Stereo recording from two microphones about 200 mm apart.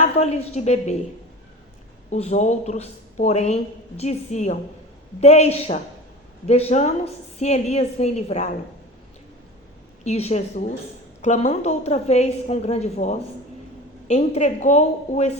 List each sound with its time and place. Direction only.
0.2 s a woman's voice: 30° left (ahead or behind)
2.0 s a woman's voice: 35° left (ahead or behind)
10.0 s a woman's voice: 35° left (ahead or behind)